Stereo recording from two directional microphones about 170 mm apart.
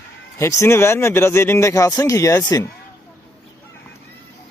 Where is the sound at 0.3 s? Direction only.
15° left (ahead or behind).